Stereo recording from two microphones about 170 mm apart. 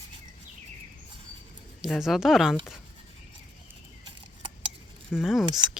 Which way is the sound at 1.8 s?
Centre (ahead or behind).